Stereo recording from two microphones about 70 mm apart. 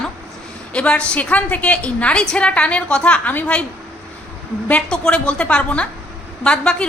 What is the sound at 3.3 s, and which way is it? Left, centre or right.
Speech, left.